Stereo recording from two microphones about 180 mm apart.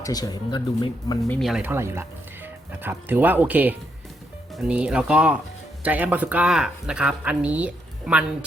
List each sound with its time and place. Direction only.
0.0 s speech: 20° left (ahead or behind)
1.3 s speech: centre (ahead or behind)